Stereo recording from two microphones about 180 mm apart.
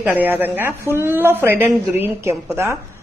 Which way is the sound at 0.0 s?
10° right (ahead or behind).